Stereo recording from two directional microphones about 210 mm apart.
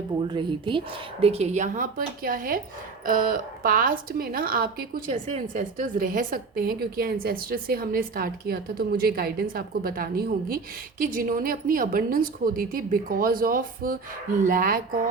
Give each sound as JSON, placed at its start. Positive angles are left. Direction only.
{"t": 0.2, "sound": "a woman's voice", "side_deg": -20}